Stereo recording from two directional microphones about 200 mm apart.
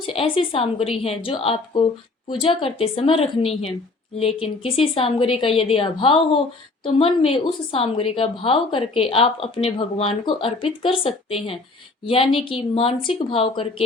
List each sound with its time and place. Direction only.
0.0 s a woman's voice: 25° left (ahead or behind)